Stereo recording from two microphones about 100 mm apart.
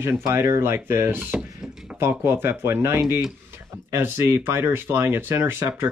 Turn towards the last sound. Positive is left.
turn(degrees=-25)  # may be behind; listen again after turning